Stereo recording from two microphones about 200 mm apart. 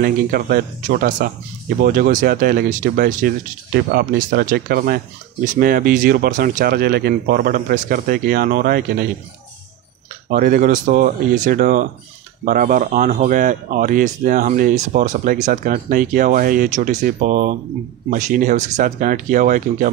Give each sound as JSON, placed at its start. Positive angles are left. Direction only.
{"t": 0.0, "sound": "speech", "side_deg": -45}
{"t": 10.3, "sound": "speech", "side_deg": -45}